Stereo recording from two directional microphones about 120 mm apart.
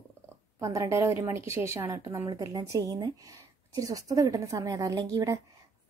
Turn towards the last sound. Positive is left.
turn(degrees=-25)  # may be behind; listen again after turning